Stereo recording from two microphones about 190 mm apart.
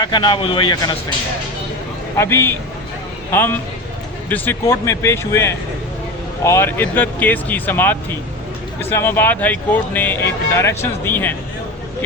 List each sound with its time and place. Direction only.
0.0 s a man's voice: 25° left (ahead or behind)
2.1 s speech: 15° left (ahead or behind)
4.3 s speech: 10° left (ahead or behind)